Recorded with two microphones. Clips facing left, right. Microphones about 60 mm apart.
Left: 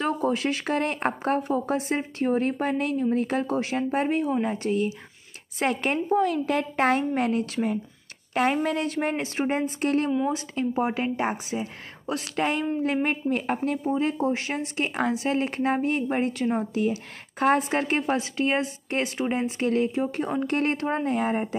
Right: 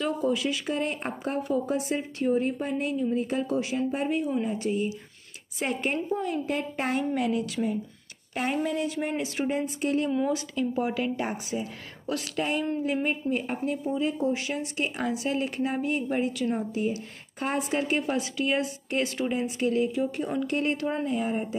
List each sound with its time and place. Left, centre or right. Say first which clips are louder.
0.0 s speech: left 2 dB; left
5.6 s a woman's voice: left 3 dB; left
7.0 s speech: left 2 dB; left
8.4 s speech: left 4 dB; left
10.5 s speech: left 2 dB; left
12.4 s speech: left 3 dB; left
13.8 s speech: left 2 dB; left
17.6 s speech: left 2 dB; left